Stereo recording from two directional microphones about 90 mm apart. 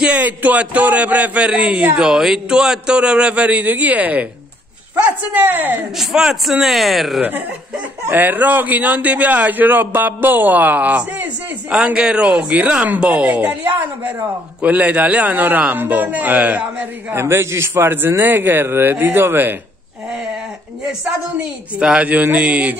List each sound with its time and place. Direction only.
0.0 s a man's voice: 15° right (ahead or behind)
5.9 s speech: 5° right (ahead or behind)
8.1 s a man's voice: 20° right (ahead or behind)
17.1 s a man's voice: 30° right (ahead or behind)
21.7 s a man's voice: 10° right (ahead or behind)